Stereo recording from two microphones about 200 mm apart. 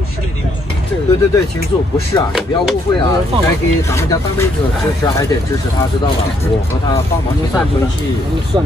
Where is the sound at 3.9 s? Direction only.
15° left (ahead or behind).